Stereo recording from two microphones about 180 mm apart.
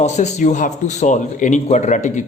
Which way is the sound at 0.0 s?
40° left (ahead or behind).